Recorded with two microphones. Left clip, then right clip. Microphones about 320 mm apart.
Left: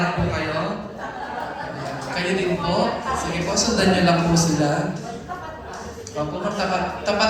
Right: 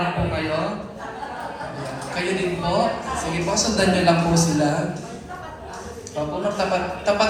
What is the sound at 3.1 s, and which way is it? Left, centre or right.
A woman's voice, right.